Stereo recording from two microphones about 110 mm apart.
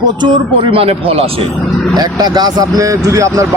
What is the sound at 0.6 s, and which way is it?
Speech, 60° right (ahead or behind).